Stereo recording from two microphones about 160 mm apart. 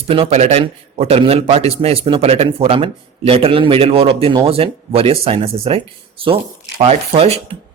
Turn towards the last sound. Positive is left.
turn(degrees=-40)  # may be behind; listen again after turning